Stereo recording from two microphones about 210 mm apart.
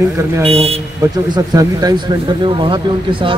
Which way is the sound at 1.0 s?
15° right (ahead or behind).